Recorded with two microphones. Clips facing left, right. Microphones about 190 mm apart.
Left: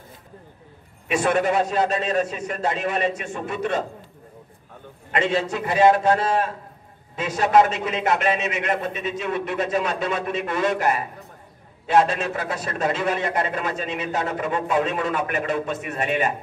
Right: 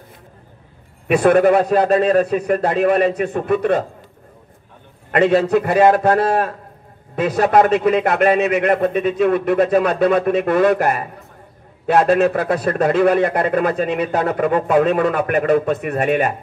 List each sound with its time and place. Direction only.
1.0 s a man's voice: 55° right (ahead or behind)
5.1 s a man's voice: 55° right (ahead or behind)